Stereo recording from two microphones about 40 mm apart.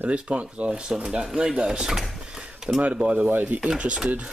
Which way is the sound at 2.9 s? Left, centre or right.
Right.